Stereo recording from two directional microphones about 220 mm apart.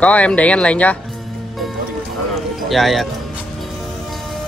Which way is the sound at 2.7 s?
Centre (ahead or behind).